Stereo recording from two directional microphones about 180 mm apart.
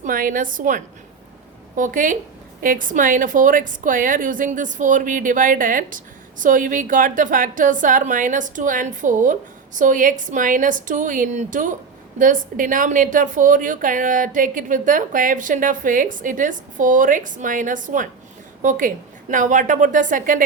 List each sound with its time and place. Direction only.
0.0 s speech: 50° right (ahead or behind)